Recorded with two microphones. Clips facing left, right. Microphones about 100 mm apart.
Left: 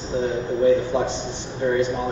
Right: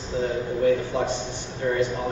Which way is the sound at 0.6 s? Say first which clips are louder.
Left 4 dB; 20° left (ahead or behind).